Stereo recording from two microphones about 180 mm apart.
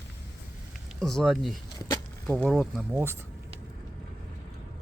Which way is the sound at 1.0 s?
5° left (ahead or behind).